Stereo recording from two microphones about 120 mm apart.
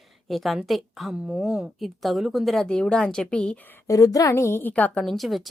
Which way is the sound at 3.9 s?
30° left (ahead or behind).